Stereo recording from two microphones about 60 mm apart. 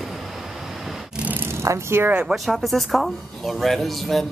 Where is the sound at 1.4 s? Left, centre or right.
Right.